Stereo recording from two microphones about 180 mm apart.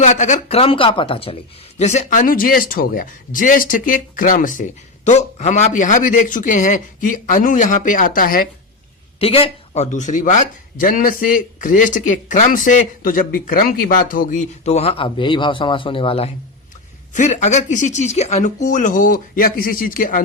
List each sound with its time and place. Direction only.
0.0 s speech: 40° left (ahead or behind)
9.2 s speech: 30° left (ahead or behind); by 20.2 s 50° left (ahead or behind)